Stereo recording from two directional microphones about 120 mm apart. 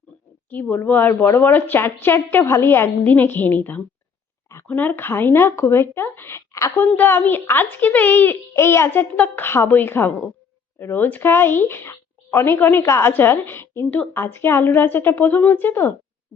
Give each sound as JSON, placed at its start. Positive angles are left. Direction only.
{"t": 0.5, "sound": "a woman's voice", "side_deg": 15}